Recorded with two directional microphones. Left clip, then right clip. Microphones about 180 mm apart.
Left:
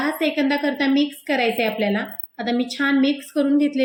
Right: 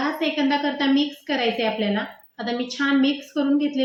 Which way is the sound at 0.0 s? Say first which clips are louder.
Left 2 dB; 35° left (ahead or behind).